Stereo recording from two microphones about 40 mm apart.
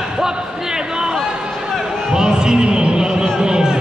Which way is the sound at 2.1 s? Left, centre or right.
Centre.